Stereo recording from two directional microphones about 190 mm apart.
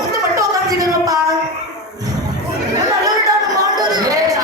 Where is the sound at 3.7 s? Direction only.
20° right (ahead or behind).